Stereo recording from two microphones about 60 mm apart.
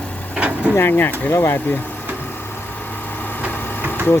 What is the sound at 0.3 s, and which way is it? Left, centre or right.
Vehicle, right.